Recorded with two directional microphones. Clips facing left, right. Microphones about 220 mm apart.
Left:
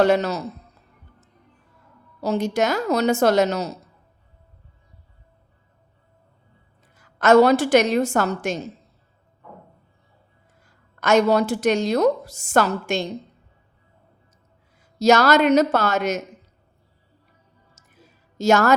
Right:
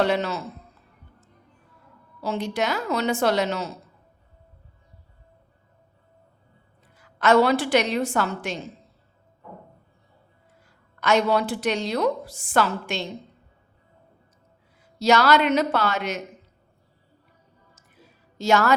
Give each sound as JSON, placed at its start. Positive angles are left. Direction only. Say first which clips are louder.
{"t": 0.0, "sound": "a man's voice", "louder": "left 5 dB", "side_deg": 45}
{"t": 2.2, "sound": "a woman's voice", "louder": "left 5 dB", "side_deg": 40}
{"t": 6.9, "sound": "a woman's voice", "louder": "left 4 dB", "side_deg": 45}
{"t": 10.7, "sound": "a woman's voice", "louder": "left 3 dB", "side_deg": 45}
{"t": 14.9, "sound": "a woman's voice", "louder": "left 3 dB", "side_deg": 45}
{"t": 17.7, "sound": "music", "louder": "left 2 dB", "side_deg": 45}